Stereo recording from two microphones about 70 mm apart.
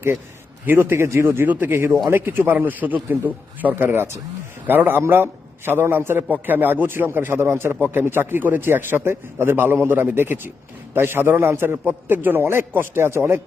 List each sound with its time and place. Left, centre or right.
0.6 s a man's voice: right